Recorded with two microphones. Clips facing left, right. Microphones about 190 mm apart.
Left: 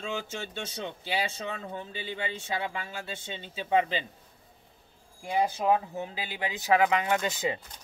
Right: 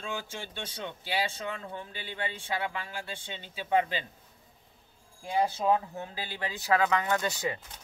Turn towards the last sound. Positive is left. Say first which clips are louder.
# left 2 dB
turn(degrees=20)  # may be behind; listen again after turning